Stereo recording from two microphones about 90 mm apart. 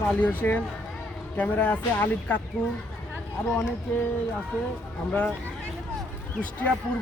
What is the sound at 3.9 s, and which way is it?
Speech, 20° left (ahead or behind).